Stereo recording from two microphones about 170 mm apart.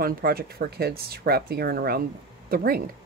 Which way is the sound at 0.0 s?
60° right (ahead or behind).